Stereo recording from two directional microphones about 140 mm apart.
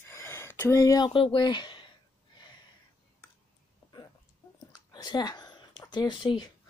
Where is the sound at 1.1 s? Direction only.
35° left (ahead or behind).